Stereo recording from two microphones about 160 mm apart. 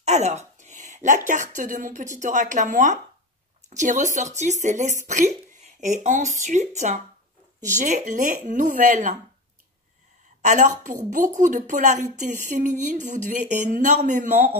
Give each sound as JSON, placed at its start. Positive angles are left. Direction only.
{"t": 0.0, "sound": "a woman's voice", "side_deg": -45}
{"t": 10.4, "sound": "a woman's voice", "side_deg": -50}